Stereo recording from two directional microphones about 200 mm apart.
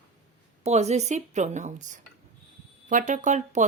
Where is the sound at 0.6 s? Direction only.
35° right (ahead or behind).